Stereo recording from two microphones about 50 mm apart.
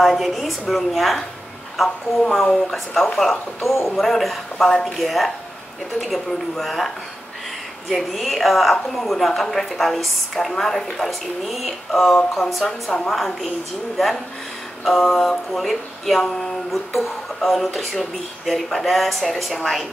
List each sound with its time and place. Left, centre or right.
0.0 s a woman's voice: centre
4.6 s speech: centre
4.9 s a woman's voice: centre
7.9 s a woman's voice: centre